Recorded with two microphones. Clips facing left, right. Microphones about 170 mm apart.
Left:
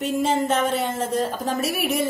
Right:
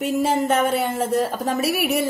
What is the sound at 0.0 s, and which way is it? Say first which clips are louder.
A woman's voice: right 1 dB; 5° right (ahead or behind).